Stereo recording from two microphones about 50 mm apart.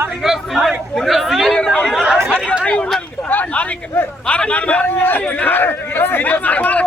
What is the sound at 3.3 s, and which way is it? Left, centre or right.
A man's voice, left.